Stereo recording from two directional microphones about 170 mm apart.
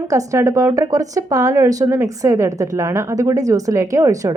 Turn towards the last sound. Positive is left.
turn(degrees=-20)  # may be behind; listen again after turning